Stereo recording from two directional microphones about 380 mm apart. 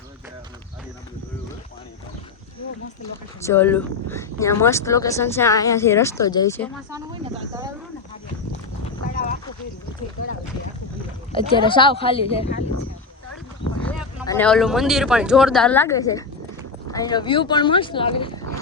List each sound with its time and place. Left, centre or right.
3.4 s speech: centre
9.1 s a sound: left
11.3 s speech: centre
13.8 s speech: centre